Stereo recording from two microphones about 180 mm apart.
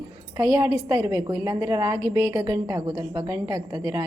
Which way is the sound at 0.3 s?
20° right (ahead or behind).